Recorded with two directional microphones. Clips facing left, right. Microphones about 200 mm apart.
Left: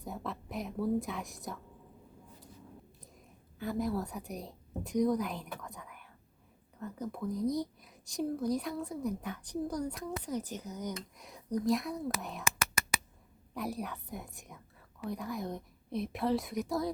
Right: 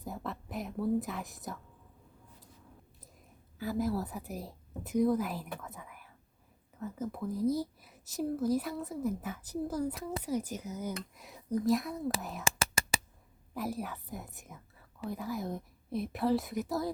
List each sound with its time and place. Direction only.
0.0 s a woman's voice: centre (ahead or behind)
3.6 s a woman's voice: centre (ahead or behind)
12.5 s whispering: 30° right (ahead or behind)
13.5 s speech: centre (ahead or behind)